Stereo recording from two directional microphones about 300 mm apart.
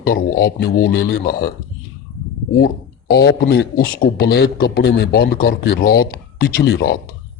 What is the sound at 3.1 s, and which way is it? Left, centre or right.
A man's voice, left.